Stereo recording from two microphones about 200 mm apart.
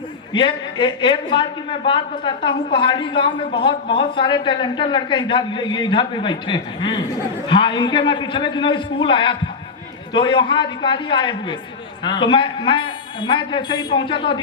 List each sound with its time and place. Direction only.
0.3 s a woman's voice: 25° left (ahead or behind)